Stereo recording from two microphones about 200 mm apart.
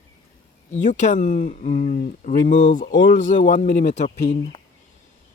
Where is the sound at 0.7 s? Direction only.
40° left (ahead or behind).